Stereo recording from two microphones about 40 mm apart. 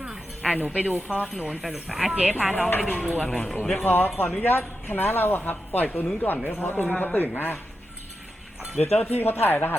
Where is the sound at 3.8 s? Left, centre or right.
Left.